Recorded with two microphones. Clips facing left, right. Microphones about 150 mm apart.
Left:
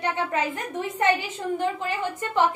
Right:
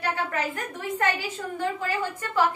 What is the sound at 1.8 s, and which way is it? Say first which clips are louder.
Speech: left 1 dB; 20° left (ahead or behind).